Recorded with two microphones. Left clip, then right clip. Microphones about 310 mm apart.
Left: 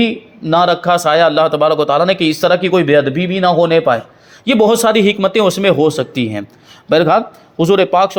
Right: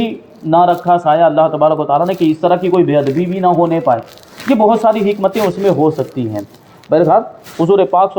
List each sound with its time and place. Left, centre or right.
0.5 s a man's voice: left